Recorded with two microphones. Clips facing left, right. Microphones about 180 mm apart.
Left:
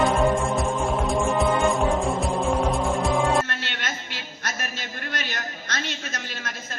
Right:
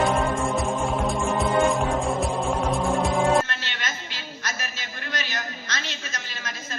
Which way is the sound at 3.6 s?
55° left (ahead or behind).